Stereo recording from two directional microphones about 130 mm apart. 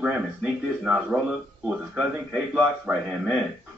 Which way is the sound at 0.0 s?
5° right (ahead or behind).